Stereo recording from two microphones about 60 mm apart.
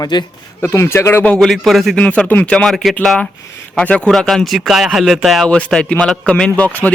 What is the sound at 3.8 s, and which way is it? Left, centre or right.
Speech, centre.